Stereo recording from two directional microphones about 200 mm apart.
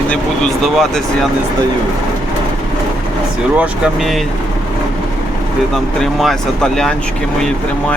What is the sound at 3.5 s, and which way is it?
Speech, 5° right (ahead or behind).